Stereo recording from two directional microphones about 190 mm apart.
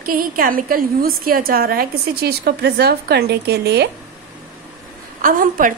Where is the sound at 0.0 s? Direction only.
50° right (ahead or behind).